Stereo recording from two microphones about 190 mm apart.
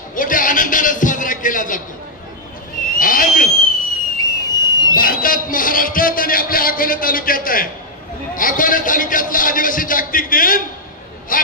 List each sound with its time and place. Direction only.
0.2 s a man's voice: 45° left (ahead or behind)
3.0 s owl: 45° left (ahead or behind)
4.2 s a sound: 20° left (ahead or behind)
4.9 s a man's voice: 50° left (ahead or behind)